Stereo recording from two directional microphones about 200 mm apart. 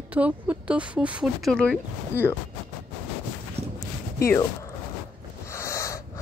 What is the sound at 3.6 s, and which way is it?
Clip-clop, 30° right (ahead or behind).